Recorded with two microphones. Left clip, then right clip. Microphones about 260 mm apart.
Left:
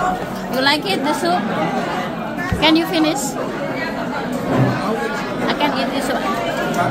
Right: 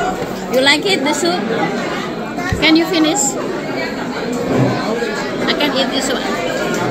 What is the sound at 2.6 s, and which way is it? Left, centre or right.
Speech, centre.